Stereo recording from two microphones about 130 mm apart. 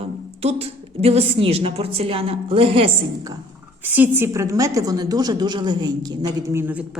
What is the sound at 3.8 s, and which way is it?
A woman's voice, 15° right (ahead or behind).